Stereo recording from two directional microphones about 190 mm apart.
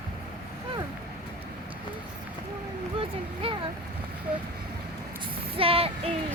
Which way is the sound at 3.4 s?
30° right (ahead or behind).